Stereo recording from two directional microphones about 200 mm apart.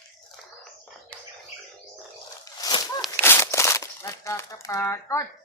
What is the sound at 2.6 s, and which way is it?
Walk, 20° left (ahead or behind).